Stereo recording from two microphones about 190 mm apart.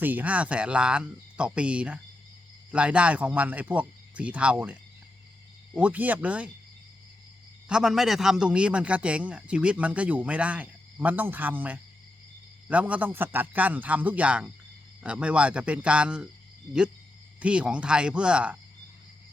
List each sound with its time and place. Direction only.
0.0 s a man's voice: 10° right (ahead or behind)
7.7 s a man's voice: 5° right (ahead or behind)
17.4 s speech: 5° right (ahead or behind)